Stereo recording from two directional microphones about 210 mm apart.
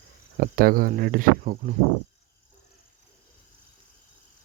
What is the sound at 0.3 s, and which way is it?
Speech, 45° right (ahead or behind).